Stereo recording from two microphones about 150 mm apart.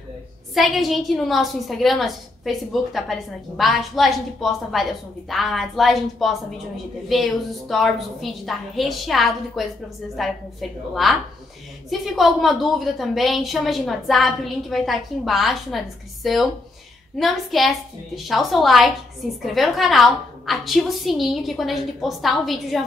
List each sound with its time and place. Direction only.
0.6 s a woman's voice: centre (ahead or behind)